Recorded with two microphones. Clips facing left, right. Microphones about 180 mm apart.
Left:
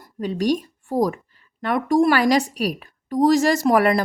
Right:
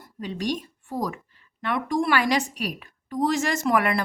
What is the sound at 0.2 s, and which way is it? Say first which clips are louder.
A woman's voice: left 7 dB; 45° left (ahead or behind).